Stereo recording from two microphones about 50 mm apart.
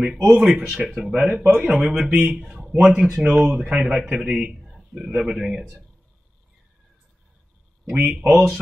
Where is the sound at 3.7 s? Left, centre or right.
Right.